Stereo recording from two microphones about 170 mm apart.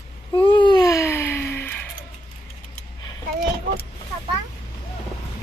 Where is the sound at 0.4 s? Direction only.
30° left (ahead or behind).